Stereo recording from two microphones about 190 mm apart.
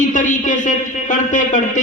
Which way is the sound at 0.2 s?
40° left (ahead or behind).